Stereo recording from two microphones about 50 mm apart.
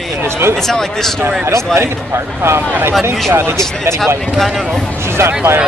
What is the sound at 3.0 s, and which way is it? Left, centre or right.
Speech, right.